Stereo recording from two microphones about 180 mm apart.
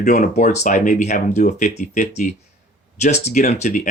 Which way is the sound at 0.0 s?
40° left (ahead or behind).